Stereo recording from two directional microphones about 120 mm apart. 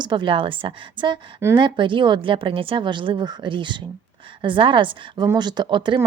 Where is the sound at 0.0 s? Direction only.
40° right (ahead or behind).